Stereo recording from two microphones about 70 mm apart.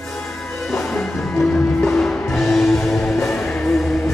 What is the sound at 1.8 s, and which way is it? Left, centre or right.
Music, centre.